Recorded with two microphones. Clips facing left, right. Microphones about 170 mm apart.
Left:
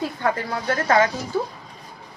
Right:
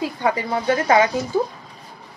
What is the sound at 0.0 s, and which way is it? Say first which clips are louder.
Speech: right 2 dB; 15° right (ahead or behind).